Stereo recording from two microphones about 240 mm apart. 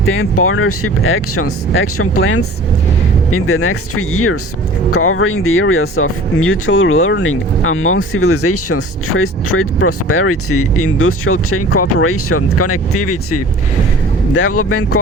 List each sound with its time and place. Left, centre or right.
0.0 s speech: left
14.3 s speech: left